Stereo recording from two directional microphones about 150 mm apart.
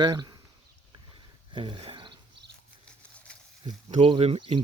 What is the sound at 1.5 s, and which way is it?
Wild animals, 30° right (ahead or behind).